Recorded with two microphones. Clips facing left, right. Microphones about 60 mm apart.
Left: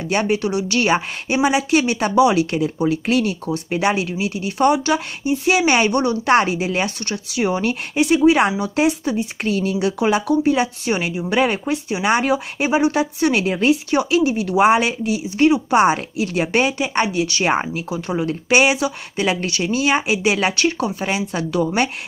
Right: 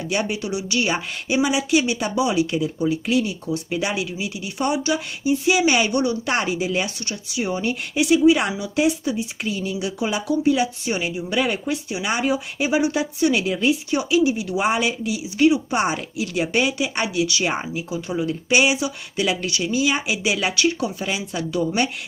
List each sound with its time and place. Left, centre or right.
0.1 s speech: left
7.9 s speech: left
8.2 s speech: left
15.7 s speech: left
17.6 s speech: left
21.5 s speech: left